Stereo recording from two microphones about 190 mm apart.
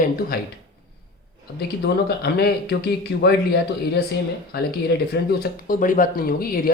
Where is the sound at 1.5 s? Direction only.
60° left (ahead or behind).